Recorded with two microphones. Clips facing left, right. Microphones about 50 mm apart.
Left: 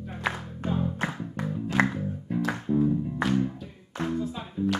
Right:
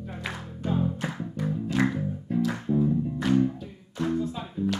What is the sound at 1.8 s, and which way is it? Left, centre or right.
Music, centre.